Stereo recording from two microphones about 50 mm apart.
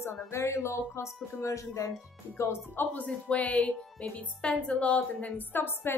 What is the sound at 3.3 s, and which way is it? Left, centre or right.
A woman's voice, left.